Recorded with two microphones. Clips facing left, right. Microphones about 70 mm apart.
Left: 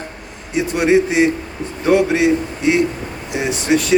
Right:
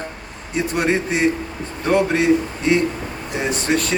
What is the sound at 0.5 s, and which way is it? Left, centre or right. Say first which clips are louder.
Speech: left 5 dB; centre.